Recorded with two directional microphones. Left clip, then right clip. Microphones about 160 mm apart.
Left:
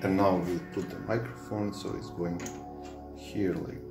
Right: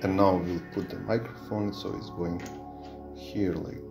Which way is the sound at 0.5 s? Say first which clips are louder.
Right 1 dB; 5° right (ahead or behind).